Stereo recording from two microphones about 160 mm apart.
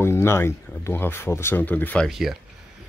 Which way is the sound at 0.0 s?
15° left (ahead or behind).